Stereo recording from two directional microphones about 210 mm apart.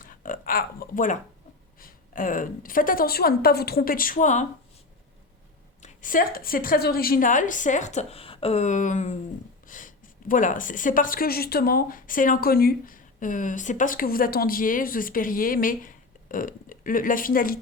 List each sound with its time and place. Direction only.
0.0 s a sound: 40° left (ahead or behind)
1.8 s a woman's voice: 40° left (ahead or behind)
5.8 s a woman's voice: 40° left (ahead or behind)